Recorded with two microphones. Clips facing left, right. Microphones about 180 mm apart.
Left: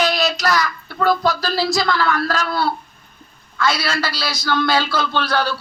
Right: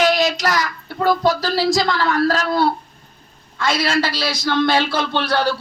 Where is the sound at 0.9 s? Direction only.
25° right (ahead or behind).